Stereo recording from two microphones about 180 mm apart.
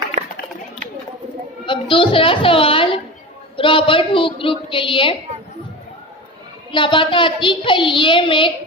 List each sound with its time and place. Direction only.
1.7 s a woman's voice: 30° left (ahead or behind)
6.7 s a woman's voice: 30° left (ahead or behind)